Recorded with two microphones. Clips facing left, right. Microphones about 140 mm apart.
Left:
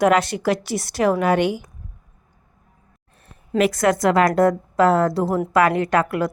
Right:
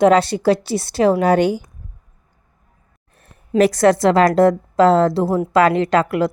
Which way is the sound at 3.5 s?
35° right (ahead or behind).